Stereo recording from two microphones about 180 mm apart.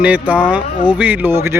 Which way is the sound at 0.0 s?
5° right (ahead or behind).